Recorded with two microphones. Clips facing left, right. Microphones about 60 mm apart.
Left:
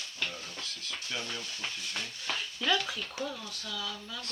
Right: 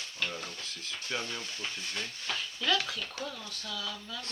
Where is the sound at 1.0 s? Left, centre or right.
Right.